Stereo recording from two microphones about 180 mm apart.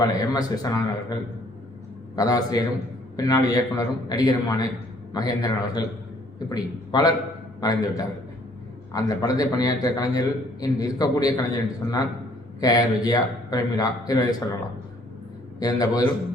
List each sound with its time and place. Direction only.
0.0 s a man's voice: 20° left (ahead or behind)
15.6 s a man's voice: 20° left (ahead or behind)